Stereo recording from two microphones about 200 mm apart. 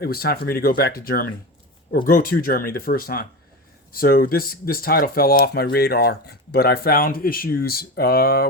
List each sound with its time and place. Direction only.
0.0 s speech: 50° left (ahead or behind)